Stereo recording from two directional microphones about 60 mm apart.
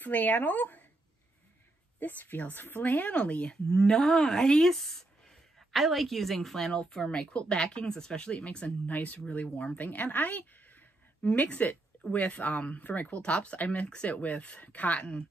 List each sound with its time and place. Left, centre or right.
0.0 s speech: left
2.0 s a woman's voice: left